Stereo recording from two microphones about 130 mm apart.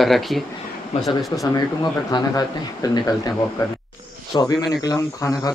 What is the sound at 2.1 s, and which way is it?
Speech, 30° left (ahead or behind).